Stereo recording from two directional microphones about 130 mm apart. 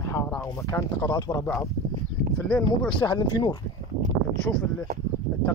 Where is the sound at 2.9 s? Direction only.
35° left (ahead or behind).